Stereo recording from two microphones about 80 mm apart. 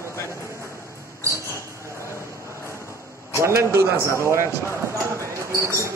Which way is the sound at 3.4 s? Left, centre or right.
Right.